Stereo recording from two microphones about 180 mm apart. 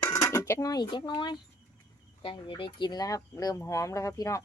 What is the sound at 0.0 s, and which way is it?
Speech, 15° left (ahead or behind).